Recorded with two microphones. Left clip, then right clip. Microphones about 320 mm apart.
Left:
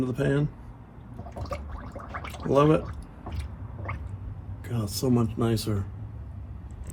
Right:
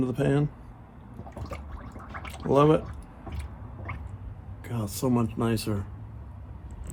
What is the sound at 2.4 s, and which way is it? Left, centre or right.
Speech, right.